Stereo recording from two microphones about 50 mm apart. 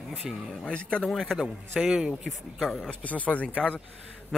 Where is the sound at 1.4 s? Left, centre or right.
Centre.